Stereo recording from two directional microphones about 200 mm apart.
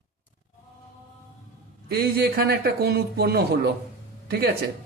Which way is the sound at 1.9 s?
50° right (ahead or behind).